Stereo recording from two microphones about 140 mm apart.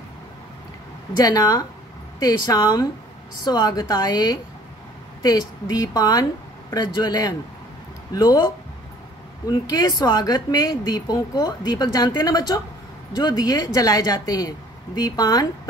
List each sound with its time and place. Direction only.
1.2 s speech: 25° left (ahead or behind)
9.5 s speech: 30° left (ahead or behind)